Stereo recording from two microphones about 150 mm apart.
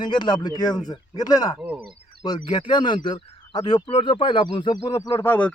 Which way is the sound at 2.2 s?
30° left (ahead or behind).